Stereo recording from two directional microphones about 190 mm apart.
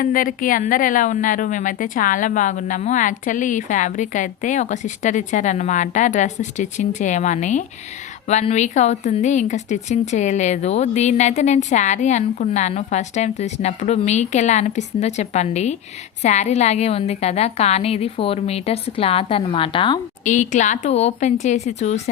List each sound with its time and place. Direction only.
0.0 s a woman's voice: 45° left (ahead or behind); by 20.0 s 25° left (ahead or behind)
20.2 s a woman's voice: 40° left (ahead or behind)